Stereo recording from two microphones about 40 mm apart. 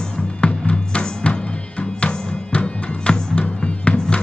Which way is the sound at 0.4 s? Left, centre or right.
Left.